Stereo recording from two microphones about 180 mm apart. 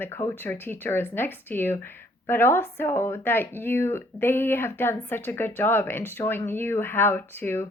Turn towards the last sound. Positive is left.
turn(degrees=10)  # may be behind; listen again after turning